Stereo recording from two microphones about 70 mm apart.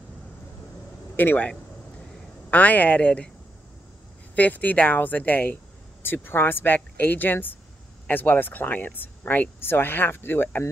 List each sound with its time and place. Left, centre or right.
1.1 s a man's voice: left
2.5 s speech: left
4.4 s speech: left